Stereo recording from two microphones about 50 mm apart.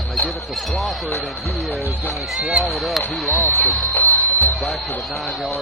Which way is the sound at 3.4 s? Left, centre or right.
Left.